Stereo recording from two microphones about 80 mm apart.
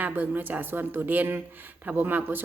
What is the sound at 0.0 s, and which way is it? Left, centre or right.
Speech, right.